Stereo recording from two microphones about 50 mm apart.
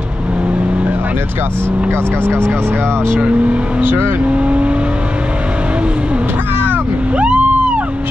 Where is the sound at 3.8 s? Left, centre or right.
Right.